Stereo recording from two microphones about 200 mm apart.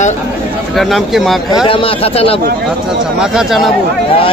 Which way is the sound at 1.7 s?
25° left (ahead or behind).